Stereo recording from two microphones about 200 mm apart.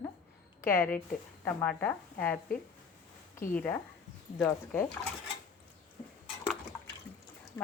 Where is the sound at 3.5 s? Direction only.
10° left (ahead or behind).